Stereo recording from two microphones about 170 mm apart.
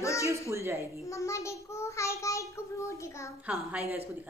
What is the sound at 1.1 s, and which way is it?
A child's voice, 15° left (ahead or behind).